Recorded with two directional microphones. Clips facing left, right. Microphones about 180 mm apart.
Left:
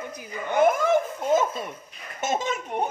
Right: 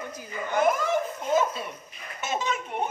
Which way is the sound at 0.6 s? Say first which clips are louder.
Left 4 dB; 50° left (ahead or behind).